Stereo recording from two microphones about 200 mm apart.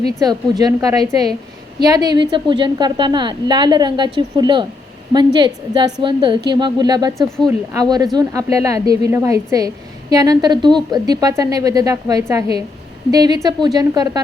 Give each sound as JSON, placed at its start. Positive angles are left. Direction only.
{"t": 0.0, "sound": "a woman's voice", "side_deg": -20}